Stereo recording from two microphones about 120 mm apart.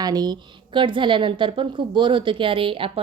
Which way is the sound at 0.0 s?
35° right (ahead or behind).